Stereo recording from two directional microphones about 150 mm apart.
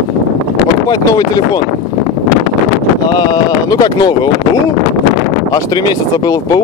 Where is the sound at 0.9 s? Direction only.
25° left (ahead or behind).